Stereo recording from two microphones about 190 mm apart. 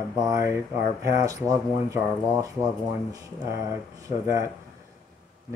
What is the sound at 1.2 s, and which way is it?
Speech, 15° right (ahead or behind).